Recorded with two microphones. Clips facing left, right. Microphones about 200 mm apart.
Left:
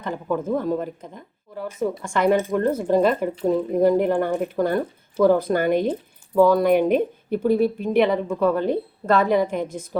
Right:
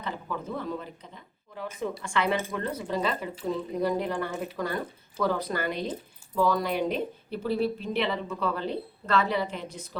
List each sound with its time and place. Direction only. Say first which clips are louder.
0.0 s speech: left 9 dB; 45° left (ahead or behind)